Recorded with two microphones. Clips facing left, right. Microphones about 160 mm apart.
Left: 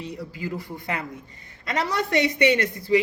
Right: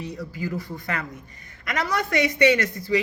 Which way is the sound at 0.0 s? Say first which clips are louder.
Right 1 dB; 25° left (ahead or behind).